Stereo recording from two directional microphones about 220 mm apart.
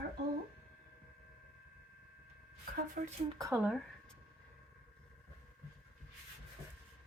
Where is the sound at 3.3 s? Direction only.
15° right (ahead or behind).